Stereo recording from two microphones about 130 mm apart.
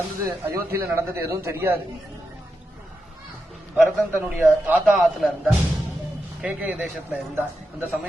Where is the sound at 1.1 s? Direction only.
20° right (ahead or behind).